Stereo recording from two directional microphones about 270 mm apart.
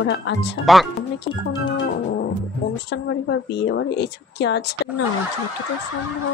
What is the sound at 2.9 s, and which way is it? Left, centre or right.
A woman's voice, left.